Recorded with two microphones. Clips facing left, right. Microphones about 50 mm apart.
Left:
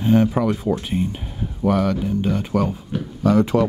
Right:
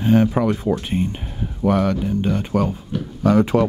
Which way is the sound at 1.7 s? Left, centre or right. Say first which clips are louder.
Right 1 dB; right.